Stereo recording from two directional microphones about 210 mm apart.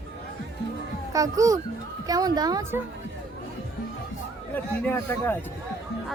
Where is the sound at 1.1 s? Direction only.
15° right (ahead or behind).